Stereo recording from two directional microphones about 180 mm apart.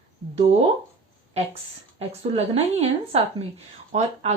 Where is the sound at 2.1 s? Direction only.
35° right (ahead or behind).